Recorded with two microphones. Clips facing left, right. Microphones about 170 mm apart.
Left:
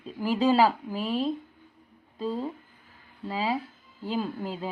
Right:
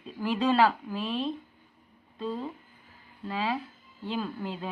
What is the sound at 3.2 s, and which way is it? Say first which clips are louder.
Speech: left 2 dB; 10° left (ahead or behind).